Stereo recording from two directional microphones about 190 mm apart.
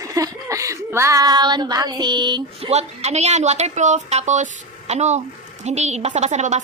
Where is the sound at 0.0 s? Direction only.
15° right (ahead or behind).